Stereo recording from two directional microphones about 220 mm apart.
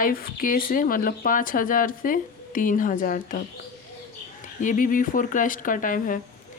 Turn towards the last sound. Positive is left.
turn(degrees=35)  # may be behind; listen again after turning